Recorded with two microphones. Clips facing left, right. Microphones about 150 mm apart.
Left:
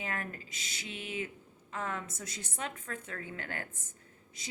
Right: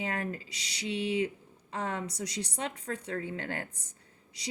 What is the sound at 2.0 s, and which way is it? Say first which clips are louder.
Speech: right 8 dB; 50° left (ahead or behind).